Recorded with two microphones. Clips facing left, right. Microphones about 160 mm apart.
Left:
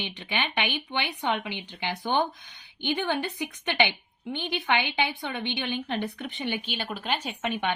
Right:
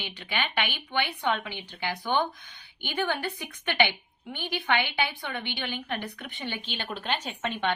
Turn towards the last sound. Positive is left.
turn(degrees=10)  # may be behind; listen again after turning